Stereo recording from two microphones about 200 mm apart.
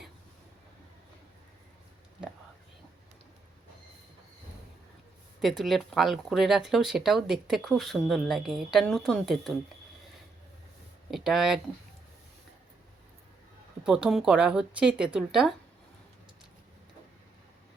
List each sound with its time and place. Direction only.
5.4 s speech: centre (ahead or behind)
11.1 s speech: centre (ahead or behind)
13.8 s speech: 5° right (ahead or behind)